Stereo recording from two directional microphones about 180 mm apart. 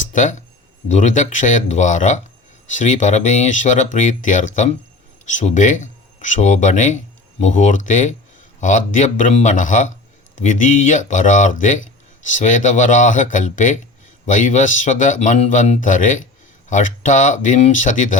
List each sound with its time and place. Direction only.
0.1 s speech: 45° left (ahead or behind)